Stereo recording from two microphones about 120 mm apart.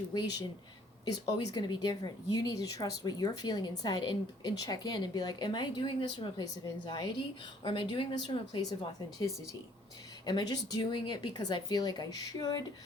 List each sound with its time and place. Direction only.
0.1 s a woman's voice: 35° left (ahead or behind)
9.1 s a woman's voice: 30° left (ahead or behind)